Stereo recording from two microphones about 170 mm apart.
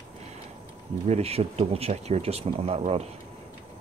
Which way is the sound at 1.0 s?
40° right (ahead or behind).